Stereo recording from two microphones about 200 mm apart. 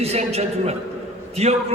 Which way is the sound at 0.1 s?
30° right (ahead or behind).